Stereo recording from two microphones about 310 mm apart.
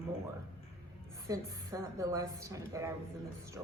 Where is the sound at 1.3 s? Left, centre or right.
Centre.